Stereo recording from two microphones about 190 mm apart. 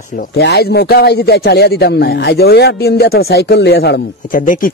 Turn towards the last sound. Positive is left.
turn(degrees=45)  # may be behind; listen again after turning